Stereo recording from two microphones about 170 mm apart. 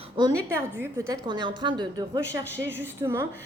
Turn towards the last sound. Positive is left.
turn(degrees=-15)  # may be behind; listen again after turning